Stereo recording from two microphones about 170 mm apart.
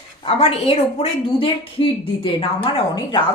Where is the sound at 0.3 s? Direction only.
35° left (ahead or behind).